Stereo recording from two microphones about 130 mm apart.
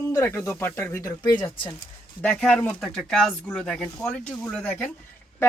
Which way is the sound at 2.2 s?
10° left (ahead or behind).